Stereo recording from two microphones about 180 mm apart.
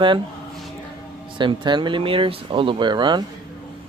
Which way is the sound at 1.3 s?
25° right (ahead or behind).